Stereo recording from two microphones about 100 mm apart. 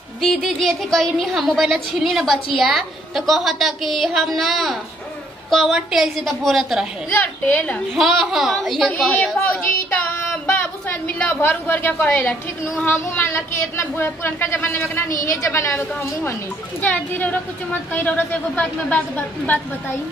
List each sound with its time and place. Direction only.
0.2 s a woman's voice: centre (ahead or behind)
7.1 s a woman's voice: 20° left (ahead or behind)
7.9 s a woman's voice: centre (ahead or behind)
9.1 s speech: 15° left (ahead or behind)
16.8 s a woman's voice: 15° left (ahead or behind)